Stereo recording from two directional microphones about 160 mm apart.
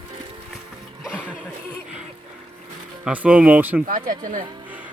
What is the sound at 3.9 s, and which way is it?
Speech, 60° right (ahead or behind).